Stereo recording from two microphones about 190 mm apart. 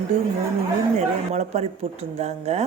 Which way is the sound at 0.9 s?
35° right (ahead or behind).